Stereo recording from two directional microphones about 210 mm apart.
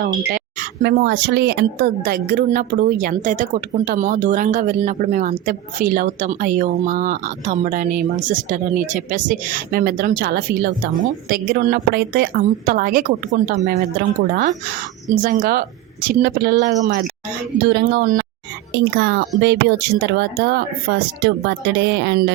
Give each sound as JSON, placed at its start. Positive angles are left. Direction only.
{"t": 0.3, "sound": "speech", "side_deg": -45}
{"t": 15.1, "sound": "speech", "side_deg": -40}